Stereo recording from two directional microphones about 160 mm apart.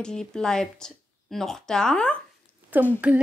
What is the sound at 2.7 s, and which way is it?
Speech, 10° right (ahead or behind).